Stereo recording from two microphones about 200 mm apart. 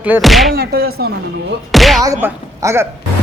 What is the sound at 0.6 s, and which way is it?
Music, 50° right (ahead or behind).